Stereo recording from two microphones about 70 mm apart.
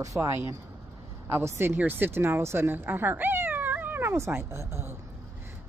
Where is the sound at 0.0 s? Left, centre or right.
Right.